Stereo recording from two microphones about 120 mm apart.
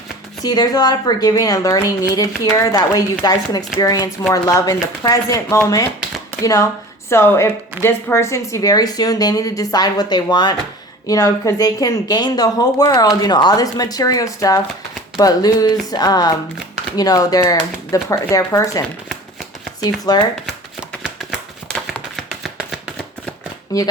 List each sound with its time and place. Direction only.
0.4 s speech: 35° left (ahead or behind)
19.8 s speech: 35° left (ahead or behind)
21.9 s a sound: centre (ahead or behind)
23.7 s speech: 30° left (ahead or behind)